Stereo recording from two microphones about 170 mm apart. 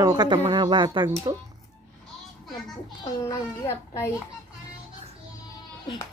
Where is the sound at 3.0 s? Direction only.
15° left (ahead or behind).